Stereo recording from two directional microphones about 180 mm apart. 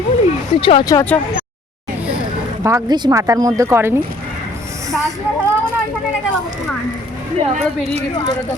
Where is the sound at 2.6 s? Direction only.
20° right (ahead or behind).